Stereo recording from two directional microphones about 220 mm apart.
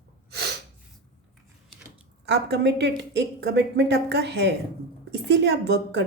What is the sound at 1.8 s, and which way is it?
A woman's voice, 50° right (ahead or behind).